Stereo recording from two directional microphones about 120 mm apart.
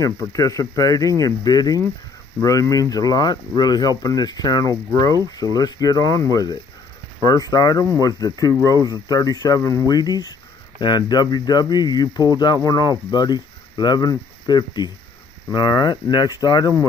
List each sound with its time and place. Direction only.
0.0 s speech: 25° left (ahead or behind)